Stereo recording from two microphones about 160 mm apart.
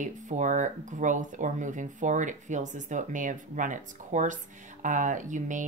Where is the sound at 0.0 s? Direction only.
50° right (ahead or behind).